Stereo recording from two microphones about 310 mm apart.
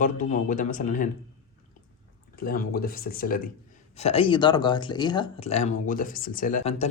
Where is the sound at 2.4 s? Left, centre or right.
Left.